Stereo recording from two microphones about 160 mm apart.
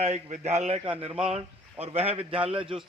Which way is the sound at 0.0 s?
45° right (ahead or behind).